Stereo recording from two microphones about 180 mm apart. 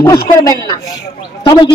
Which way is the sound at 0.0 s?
20° left (ahead or behind).